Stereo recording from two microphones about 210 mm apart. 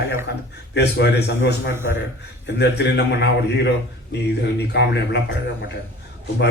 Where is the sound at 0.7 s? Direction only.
55° left (ahead or behind).